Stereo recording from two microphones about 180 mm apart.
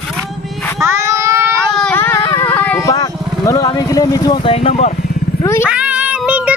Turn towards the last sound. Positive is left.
turn(degrees=-10)  # may be behind; listen again after turning